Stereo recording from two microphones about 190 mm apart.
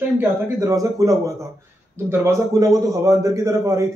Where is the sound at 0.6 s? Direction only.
15° right (ahead or behind).